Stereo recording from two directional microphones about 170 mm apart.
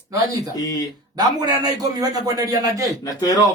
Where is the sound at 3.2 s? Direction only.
20° left (ahead or behind).